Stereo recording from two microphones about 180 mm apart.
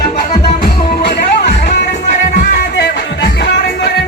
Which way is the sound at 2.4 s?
60° left (ahead or behind).